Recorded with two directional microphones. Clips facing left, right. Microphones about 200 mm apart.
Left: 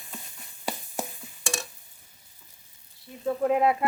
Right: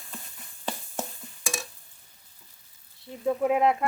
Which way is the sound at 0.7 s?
10° left (ahead or behind).